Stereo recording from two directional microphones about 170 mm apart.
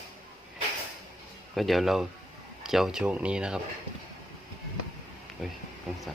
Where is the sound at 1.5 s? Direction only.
Centre (ahead or behind).